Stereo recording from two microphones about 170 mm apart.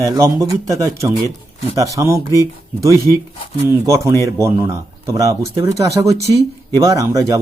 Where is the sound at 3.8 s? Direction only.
20° right (ahead or behind).